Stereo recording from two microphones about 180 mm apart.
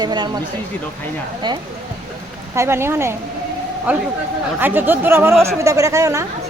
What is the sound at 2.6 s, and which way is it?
Speech, 15° right (ahead or behind).